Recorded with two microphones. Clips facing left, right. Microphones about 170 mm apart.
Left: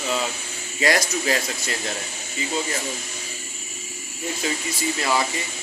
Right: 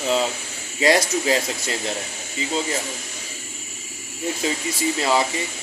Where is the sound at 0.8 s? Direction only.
25° right (ahead or behind).